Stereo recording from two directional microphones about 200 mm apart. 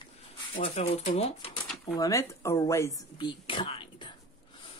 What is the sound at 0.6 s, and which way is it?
Speech, 30° left (ahead or behind).